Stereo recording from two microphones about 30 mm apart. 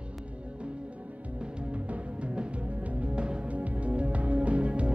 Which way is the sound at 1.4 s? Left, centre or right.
Right.